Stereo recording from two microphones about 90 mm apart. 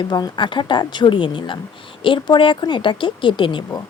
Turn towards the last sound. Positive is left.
turn(degrees=65)  # may be behind; listen again after turning